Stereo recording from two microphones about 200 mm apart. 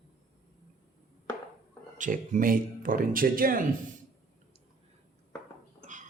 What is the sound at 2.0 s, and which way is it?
Speech, 40° right (ahead or behind).